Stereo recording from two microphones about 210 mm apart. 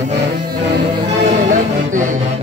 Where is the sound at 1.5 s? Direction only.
40° right (ahead or behind).